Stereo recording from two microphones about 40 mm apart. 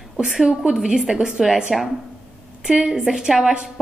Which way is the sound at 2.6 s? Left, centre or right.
Centre.